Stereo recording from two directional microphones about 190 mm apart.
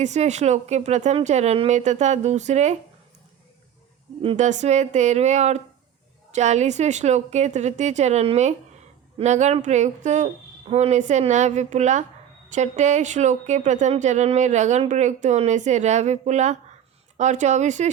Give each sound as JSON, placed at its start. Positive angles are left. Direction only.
{"t": 0.0, "sound": "speech", "side_deg": -40}
{"t": 4.2, "sound": "speech", "side_deg": -35}